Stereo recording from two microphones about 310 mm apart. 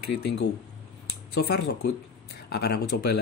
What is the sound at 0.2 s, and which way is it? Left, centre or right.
Speech, left.